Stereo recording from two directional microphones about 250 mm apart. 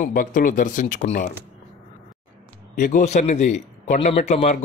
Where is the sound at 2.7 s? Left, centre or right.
Left.